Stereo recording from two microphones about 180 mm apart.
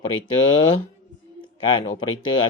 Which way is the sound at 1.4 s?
30° left (ahead or behind).